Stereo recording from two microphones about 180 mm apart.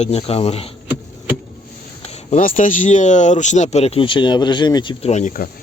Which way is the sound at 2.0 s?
40° left (ahead or behind).